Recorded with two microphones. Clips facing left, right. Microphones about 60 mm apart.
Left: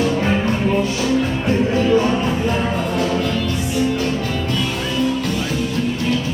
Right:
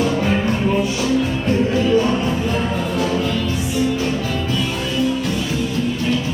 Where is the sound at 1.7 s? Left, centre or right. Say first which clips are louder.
Left 1 dB; left.